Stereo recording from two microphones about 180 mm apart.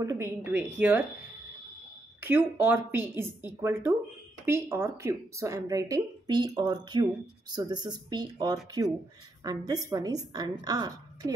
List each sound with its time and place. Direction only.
0.0 s a woman's voice: 15° right (ahead or behind)
2.1 s a woman's voice: 10° right (ahead or behind)